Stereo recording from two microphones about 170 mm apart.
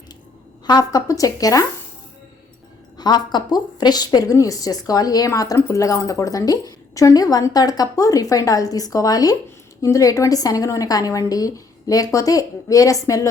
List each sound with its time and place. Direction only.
0.6 s a woman's voice: 25° left (ahead or behind)
3.0 s a woman's voice: 25° left (ahead or behind)